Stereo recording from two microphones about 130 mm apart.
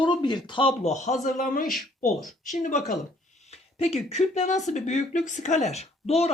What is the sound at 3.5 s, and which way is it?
Speech, 50° left (ahead or behind).